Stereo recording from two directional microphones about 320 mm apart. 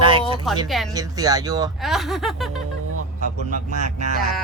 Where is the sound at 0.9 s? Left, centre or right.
Centre.